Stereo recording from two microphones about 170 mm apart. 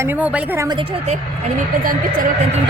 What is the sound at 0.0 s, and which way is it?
Speech, 10° right (ahead or behind).